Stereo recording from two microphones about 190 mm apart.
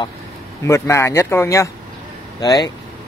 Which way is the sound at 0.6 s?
15° left (ahead or behind).